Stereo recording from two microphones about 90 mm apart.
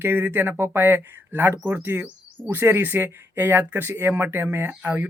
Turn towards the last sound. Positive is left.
turn(degrees=-25)  # may be behind; listen again after turning